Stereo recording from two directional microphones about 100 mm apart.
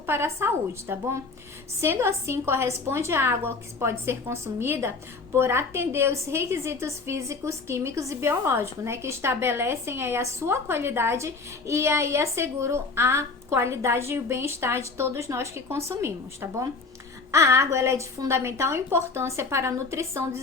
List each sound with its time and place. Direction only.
0.0 s a woman's voice: 25° right (ahead or behind)